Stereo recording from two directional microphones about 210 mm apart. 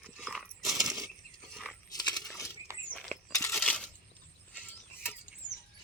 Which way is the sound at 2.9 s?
5° left (ahead or behind).